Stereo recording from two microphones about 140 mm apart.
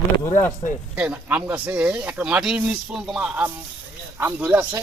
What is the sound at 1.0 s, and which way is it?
Speech, 10° right (ahead or behind).